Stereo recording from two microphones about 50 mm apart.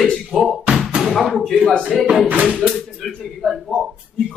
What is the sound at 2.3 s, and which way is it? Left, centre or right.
Speech, right.